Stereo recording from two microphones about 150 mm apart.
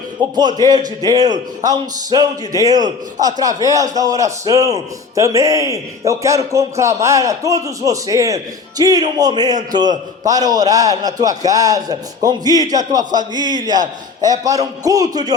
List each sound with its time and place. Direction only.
0.2 s speech: 30° right (ahead or behind)